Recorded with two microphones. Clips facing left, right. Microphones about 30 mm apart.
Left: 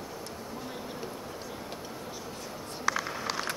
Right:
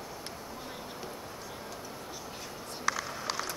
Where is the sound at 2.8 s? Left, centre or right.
Centre.